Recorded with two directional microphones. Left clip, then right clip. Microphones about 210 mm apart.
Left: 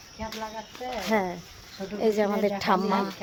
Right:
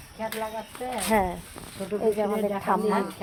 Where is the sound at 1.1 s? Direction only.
10° left (ahead or behind).